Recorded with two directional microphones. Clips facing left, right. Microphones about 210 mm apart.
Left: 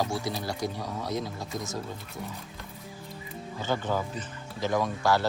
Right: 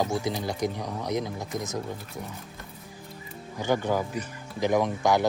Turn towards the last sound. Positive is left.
turn(degrees=-20)  # may be behind; listen again after turning